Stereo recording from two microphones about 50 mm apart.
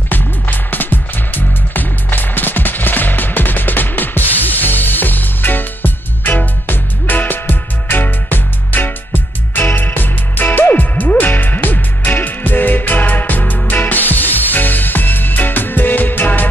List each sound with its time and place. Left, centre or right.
0.1 s music: left